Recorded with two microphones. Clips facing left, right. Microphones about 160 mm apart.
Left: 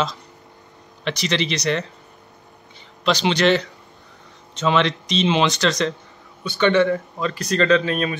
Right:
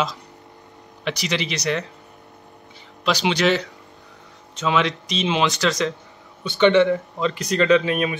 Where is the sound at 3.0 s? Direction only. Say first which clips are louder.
Left 2 dB; 5° right (ahead or behind).